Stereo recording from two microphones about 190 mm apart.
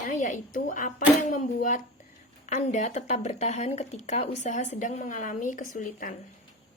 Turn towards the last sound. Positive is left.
turn(degrees=45)  # may be behind; listen again after turning